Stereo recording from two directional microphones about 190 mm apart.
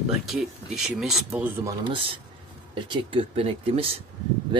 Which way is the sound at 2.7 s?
25° right (ahead or behind).